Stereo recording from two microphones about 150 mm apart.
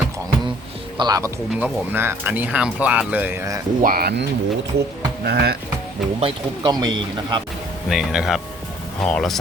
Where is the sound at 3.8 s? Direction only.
80° right.